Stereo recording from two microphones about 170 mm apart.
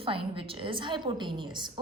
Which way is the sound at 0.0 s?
30° right (ahead or behind).